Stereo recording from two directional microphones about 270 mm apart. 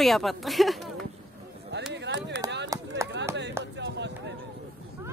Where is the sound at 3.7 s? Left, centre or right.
Right.